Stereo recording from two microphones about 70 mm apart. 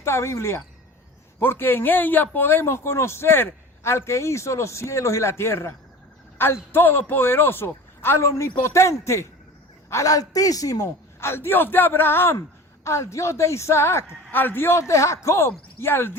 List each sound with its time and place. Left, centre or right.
0.0 s a man's voice: left
9.9 s a man's voice: left
11.2 s a man's voice: left
12.8 s a woman's voice: left
14.3 s a man's voice: left